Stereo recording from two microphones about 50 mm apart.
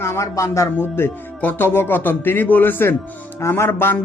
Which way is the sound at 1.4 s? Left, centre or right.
Left.